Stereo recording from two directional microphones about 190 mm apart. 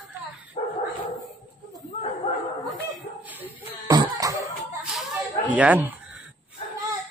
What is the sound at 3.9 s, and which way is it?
Cough, 15° right (ahead or behind).